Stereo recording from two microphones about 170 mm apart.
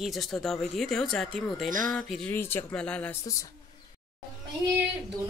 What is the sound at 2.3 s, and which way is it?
Speech, 10° left (ahead or behind).